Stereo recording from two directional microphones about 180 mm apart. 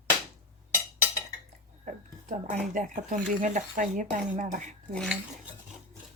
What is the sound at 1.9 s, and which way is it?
Speech, 45° right (ahead or behind).